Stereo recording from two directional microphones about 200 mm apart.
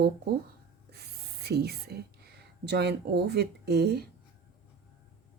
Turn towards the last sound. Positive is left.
turn(degrees=-55)  # may be behind; listen again after turning